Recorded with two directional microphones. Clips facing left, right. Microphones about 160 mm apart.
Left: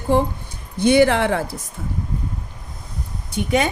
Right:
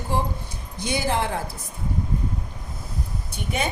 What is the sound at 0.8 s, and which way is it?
Speech, 65° left (ahead or behind).